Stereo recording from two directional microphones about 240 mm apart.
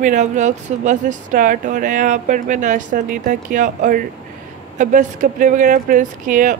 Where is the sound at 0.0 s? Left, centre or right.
Right.